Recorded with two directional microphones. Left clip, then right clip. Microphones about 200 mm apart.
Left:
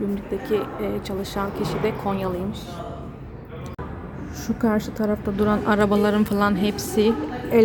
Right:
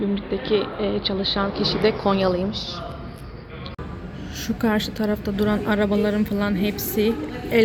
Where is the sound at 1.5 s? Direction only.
25° left (ahead or behind).